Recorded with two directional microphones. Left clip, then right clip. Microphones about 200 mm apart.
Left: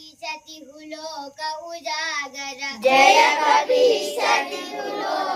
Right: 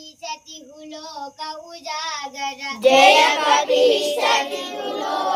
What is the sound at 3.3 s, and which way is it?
Child singing, 40° right (ahead or behind).